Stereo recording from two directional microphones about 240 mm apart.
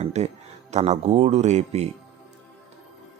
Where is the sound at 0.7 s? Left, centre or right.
Right.